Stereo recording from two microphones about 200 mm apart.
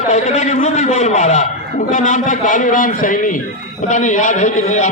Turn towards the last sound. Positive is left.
turn(degrees=35)  # may be behind; listen again after turning